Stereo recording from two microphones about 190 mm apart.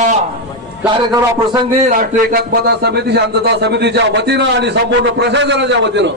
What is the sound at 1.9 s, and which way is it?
A man's voice, 45° right (ahead or behind).